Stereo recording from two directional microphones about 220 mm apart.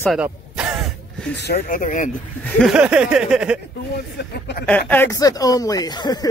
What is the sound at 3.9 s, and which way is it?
Speech, 50° left (ahead or behind).